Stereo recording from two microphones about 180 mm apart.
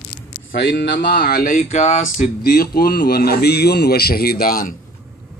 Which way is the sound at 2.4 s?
55° left (ahead or behind).